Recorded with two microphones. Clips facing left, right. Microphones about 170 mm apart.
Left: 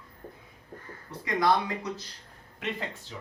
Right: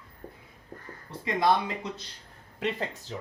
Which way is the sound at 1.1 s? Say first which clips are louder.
Right 1 dB; 25° right (ahead or behind).